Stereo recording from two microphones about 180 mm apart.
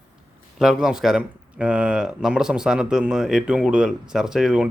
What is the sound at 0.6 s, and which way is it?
Speech, 5° right (ahead or behind).